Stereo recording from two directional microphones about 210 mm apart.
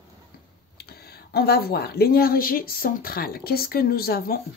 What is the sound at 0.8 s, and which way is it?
Speech, 50° left (ahead or behind).